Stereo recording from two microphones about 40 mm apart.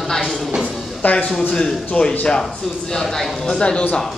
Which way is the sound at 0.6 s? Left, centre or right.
Centre.